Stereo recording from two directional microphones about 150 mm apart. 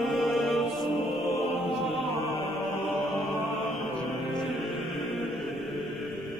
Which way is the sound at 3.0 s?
Centre (ahead or behind).